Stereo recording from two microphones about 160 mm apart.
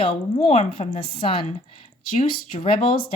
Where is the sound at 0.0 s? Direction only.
35° left (ahead or behind).